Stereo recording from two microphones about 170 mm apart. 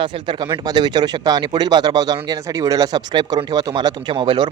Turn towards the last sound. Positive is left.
turn(degrees=-30)  # may be behind; listen again after turning